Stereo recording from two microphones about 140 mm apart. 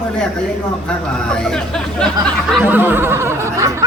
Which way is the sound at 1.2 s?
5° left (ahead or behind).